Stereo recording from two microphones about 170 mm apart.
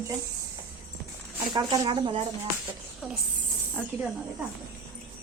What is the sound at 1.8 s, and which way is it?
Speech, 30° right (ahead or behind).